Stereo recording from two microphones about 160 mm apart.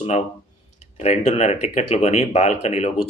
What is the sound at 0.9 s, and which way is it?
Speech, 45° left (ahead or behind).